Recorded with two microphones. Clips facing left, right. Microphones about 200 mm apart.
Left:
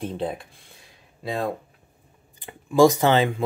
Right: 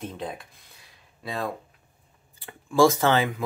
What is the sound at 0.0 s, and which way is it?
Speech, 30° left (ahead or behind).